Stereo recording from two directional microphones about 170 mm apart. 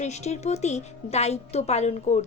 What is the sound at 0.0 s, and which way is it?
Speech, 40° left (ahead or behind).